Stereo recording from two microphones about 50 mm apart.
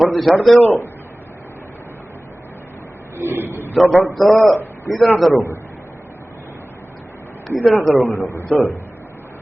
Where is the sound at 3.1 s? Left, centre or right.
Right.